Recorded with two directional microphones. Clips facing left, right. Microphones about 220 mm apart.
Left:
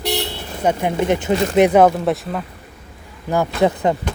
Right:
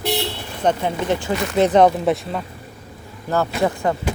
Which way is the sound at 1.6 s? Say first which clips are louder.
Right 2 dB; 5° left (ahead or behind).